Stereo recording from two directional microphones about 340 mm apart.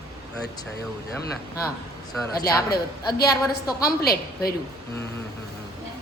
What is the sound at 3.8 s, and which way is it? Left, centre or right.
Speech, left.